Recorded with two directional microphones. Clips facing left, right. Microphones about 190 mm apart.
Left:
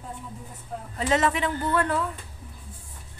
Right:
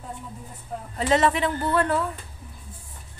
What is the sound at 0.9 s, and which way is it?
A man's voice, 35° right (ahead or behind).